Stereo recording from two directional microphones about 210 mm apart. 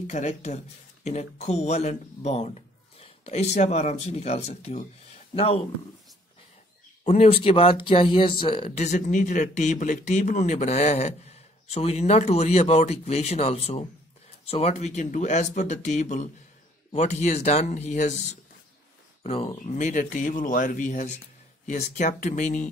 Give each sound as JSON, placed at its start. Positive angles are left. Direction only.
{"t": 0.0, "sound": "speech", "side_deg": 35}
{"t": 7.1, "sound": "speech", "side_deg": 30}
{"t": 19.2, "sound": "speech", "side_deg": 25}